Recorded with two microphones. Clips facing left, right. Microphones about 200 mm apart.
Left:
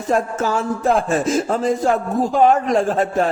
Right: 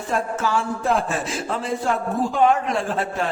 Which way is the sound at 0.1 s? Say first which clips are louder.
Left 4 dB; 40° left (ahead or behind).